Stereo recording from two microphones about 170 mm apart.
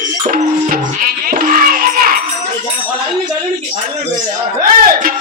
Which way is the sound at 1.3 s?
60° right (ahead or behind).